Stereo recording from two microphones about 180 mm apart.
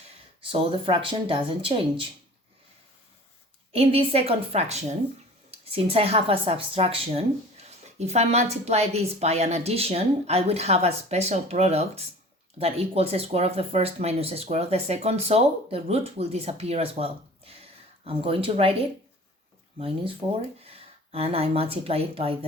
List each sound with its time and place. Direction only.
0.5 s speech: 30° right (ahead or behind)
3.7 s a woman's voice: 30° right (ahead or behind)
20.6 s speech: 35° right (ahead or behind)